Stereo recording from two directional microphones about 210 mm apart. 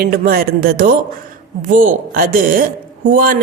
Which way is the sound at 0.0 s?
45° right (ahead or behind).